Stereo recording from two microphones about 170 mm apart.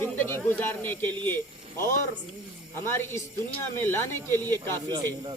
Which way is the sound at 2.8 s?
15° left (ahead or behind).